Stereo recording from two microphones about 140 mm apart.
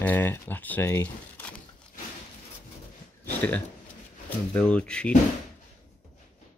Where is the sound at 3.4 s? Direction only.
10° left (ahead or behind).